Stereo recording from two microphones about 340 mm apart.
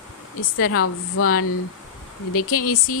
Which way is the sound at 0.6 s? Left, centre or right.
Left.